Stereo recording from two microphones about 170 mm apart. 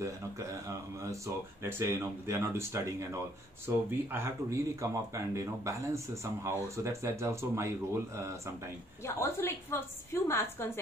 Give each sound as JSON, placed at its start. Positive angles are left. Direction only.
{"t": 1.0, "sound": "speech", "side_deg": -15}
{"t": 9.0, "sound": "a woman's voice", "side_deg": 15}